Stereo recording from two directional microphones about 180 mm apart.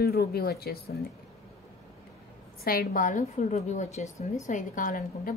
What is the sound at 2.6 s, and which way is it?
A woman's voice, 50° left (ahead or behind).